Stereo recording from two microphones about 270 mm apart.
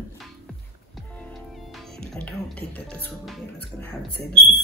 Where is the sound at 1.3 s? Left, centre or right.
Centre.